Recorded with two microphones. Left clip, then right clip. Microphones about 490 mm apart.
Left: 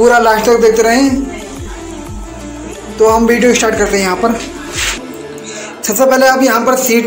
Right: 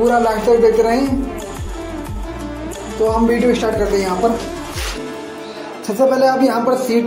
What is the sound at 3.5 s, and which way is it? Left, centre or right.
Speech, right.